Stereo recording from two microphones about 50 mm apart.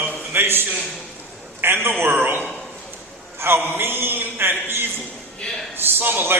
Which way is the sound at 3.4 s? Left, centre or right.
Right.